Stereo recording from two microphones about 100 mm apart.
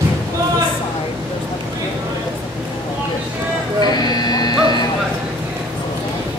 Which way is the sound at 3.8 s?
45° left (ahead or behind).